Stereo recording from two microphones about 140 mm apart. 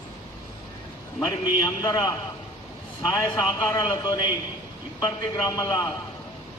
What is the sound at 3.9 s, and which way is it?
Speech, 30° left (ahead or behind).